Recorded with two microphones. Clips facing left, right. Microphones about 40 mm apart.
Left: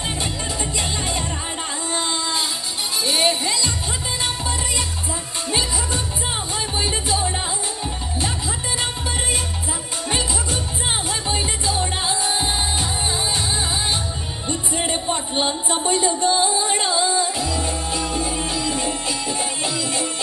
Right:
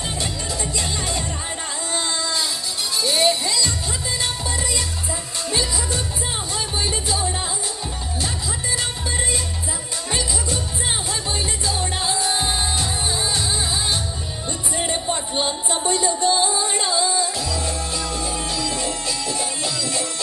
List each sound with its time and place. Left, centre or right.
0.2 s music: left
1.9 s a sound: left
3.0 s music: left
5.5 s music: left
10.1 s music: left
14.9 s a sound: centre
15.9 s music: left